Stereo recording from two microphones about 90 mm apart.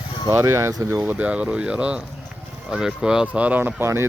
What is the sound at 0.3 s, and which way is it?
Speech, 30° right (ahead or behind).